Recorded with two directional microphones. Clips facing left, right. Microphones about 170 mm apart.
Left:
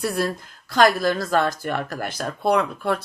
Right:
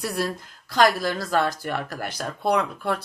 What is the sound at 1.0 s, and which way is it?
Speech, 10° right (ahead or behind).